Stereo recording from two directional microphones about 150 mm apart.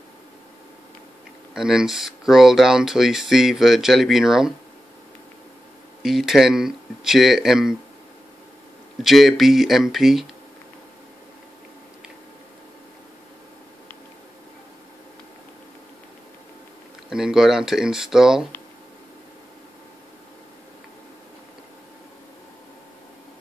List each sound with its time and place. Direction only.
1.5 s speech: 5° right (ahead or behind)
6.0 s speech: centre (ahead or behind)
9.0 s speech: centre (ahead or behind)
17.1 s speech: 5° right (ahead or behind)